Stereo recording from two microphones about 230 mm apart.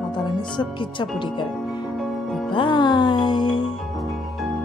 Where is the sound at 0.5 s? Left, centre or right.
Left.